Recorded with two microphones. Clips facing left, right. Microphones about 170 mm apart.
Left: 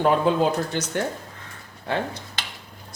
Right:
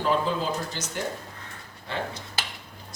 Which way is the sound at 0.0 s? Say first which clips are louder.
Left 6 dB; 60° left (ahead or behind).